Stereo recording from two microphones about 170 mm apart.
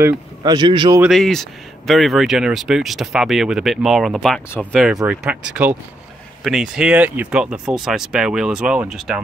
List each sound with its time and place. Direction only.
0.0 s speech: 25° right (ahead or behind)
1.0 s speech: centre (ahead or behind)